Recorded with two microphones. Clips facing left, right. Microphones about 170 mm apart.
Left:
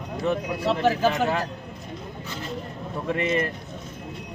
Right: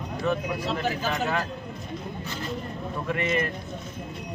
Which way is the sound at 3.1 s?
30° left (ahead or behind).